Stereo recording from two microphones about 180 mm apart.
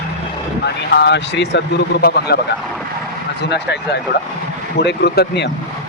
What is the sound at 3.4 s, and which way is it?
Speech, 70° left (ahead or behind).